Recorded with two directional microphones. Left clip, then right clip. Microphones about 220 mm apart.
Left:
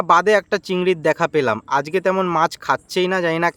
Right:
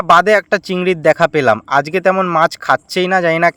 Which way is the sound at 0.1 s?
15° right (ahead or behind).